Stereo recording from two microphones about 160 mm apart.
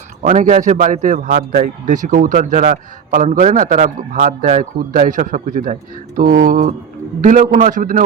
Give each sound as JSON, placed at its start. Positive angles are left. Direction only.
{"t": 0.2, "sound": "a man's voice", "side_deg": -50}